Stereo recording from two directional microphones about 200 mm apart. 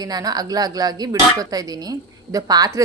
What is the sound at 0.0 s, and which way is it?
A woman's voice, 20° right (ahead or behind).